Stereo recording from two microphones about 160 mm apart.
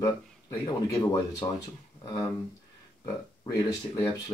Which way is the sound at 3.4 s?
20° left (ahead or behind).